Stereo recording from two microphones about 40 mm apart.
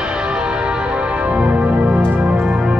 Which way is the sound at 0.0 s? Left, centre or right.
Right.